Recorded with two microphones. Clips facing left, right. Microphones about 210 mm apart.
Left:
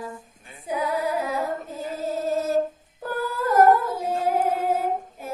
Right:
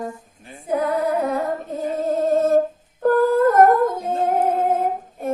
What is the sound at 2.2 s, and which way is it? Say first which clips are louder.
Music: right 7 dB; 55° right (ahead or behind).